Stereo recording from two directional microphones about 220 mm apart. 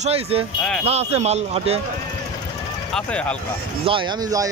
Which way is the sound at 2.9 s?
5° left (ahead or behind).